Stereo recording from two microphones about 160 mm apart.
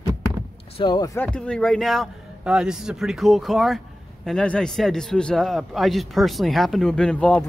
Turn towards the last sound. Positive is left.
turn(degrees=5)  # may be behind; listen again after turning